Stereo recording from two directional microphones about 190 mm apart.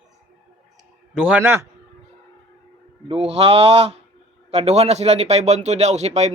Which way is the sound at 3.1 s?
30° right (ahead or behind).